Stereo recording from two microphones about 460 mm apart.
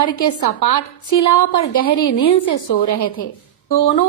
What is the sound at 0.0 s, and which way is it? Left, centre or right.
A woman's voice, left.